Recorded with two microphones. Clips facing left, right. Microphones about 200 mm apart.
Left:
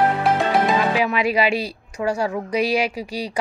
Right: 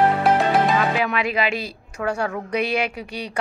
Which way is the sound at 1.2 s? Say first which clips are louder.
Left 4 dB; 40° left (ahead or behind).